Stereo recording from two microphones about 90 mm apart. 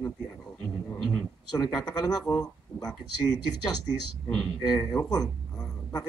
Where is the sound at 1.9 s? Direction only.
45° left (ahead or behind).